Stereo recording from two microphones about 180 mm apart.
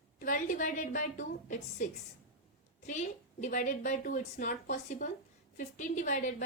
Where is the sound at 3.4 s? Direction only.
45° left (ahead or behind).